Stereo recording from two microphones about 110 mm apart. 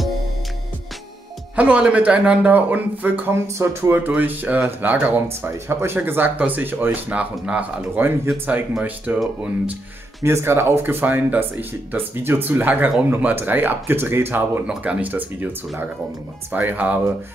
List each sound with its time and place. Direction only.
1.6 s speech: 10° right (ahead or behind)
10.2 s speech: 20° right (ahead or behind)
16.5 s speech: 15° right (ahead or behind)